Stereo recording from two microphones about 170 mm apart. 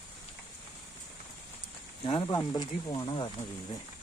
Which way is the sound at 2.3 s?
20° left (ahead or behind).